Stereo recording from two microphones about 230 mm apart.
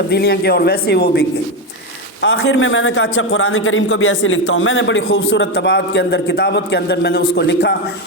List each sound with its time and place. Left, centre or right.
0.1 s speech: left
2.2 s a man's voice: left